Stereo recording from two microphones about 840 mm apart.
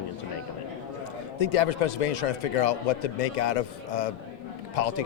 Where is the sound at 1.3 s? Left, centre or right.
Left.